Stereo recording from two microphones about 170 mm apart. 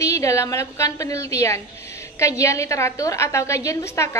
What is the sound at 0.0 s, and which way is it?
A woman's voice, 15° left (ahead or behind).